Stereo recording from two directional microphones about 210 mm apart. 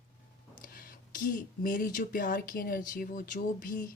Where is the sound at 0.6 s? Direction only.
45° left (ahead or behind).